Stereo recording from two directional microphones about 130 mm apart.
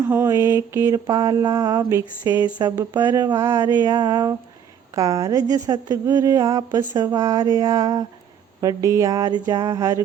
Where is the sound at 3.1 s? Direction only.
30° right (ahead or behind).